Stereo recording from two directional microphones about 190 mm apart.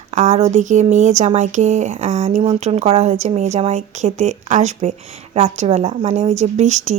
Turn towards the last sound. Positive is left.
turn(degrees=-35)  # may be behind; listen again after turning